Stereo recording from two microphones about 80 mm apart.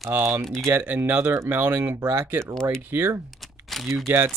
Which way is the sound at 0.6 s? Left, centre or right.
Right.